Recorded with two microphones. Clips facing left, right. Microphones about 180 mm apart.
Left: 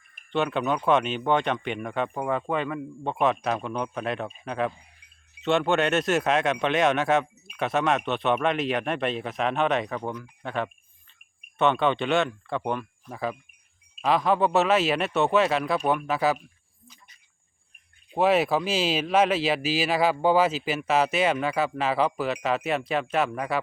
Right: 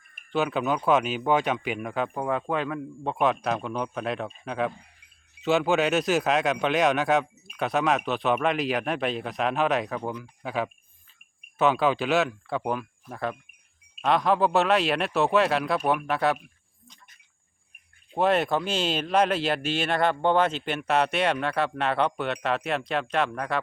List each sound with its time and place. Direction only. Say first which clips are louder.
0.3 s speech: even; centre (ahead or behind)
18.2 s speech: left 1 dB; 5° left (ahead or behind)